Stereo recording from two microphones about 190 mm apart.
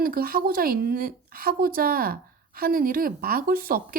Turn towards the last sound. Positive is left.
turn(degrees=-50)  # may be behind; listen again after turning